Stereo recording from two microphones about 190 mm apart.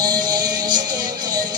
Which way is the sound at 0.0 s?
20° right (ahead or behind).